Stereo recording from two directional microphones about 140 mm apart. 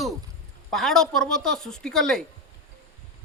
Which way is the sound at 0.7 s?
Centre (ahead or behind).